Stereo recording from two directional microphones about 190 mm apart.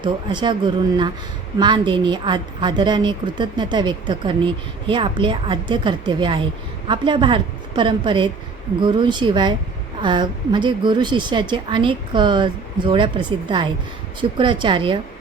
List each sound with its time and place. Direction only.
0.0 s a woman's voice: 25° right (ahead or behind)